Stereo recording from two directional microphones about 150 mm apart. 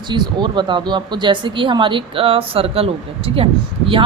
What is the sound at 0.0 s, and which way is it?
Speech, 30° right (ahead or behind).